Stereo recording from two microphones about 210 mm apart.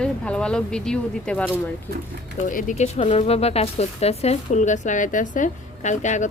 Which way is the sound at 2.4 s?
40° left (ahead or behind).